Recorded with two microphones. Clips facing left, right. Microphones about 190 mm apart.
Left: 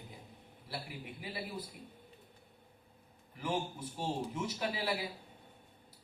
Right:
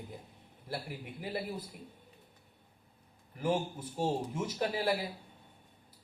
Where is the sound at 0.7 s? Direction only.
50° right (ahead or behind).